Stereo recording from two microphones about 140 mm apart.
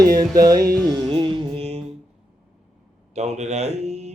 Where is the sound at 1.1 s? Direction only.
35° right (ahead or behind).